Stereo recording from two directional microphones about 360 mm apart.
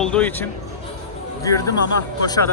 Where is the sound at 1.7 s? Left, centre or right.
Left.